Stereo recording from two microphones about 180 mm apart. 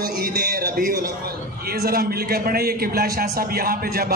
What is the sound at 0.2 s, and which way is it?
Music, 60° right (ahead or behind).